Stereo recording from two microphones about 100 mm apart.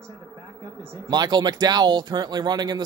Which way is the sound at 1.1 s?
45° right (ahead or behind).